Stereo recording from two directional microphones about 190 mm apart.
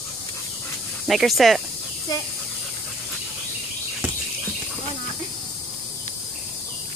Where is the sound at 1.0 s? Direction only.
Centre (ahead or behind).